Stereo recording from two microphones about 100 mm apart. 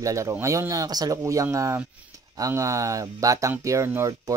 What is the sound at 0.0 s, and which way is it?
Speech, 30° right (ahead or behind).